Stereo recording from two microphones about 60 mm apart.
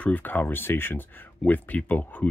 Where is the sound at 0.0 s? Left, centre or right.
Left.